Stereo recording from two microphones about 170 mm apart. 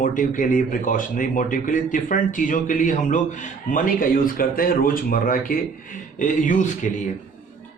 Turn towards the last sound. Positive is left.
turn(degrees=50)  # may be behind; listen again after turning